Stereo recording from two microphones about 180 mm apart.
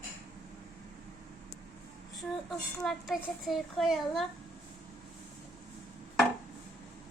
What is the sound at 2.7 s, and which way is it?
Speech, centre (ahead or behind).